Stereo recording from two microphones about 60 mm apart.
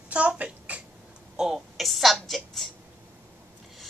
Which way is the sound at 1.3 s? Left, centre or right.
Centre.